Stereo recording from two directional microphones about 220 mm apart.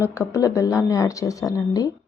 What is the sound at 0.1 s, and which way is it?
Speech, 15° left (ahead or behind).